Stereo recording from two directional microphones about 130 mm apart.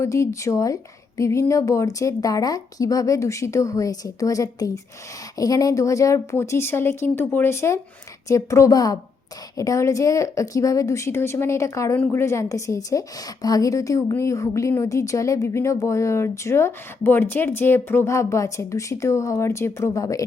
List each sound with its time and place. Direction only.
0.0 s a woman's voice: 25° left (ahead or behind)